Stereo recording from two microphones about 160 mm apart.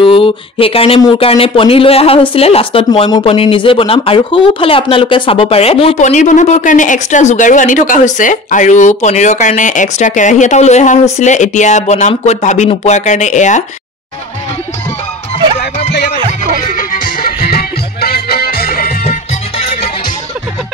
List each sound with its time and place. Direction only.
0.0 s speech: 35° left (ahead or behind)
2.9 s speech: 25° left (ahead or behind); by 13.7 s 50° left (ahead or behind)
16.6 s music: 55° left (ahead or behind)